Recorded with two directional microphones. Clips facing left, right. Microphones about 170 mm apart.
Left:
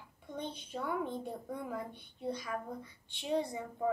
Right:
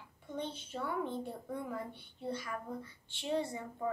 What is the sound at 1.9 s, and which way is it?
A woman's voice, 15° left (ahead or behind).